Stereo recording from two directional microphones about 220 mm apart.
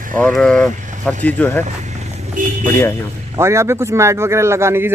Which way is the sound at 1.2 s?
5° left (ahead or behind).